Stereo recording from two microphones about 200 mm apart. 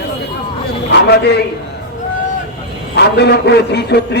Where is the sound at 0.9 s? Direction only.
55° left (ahead or behind).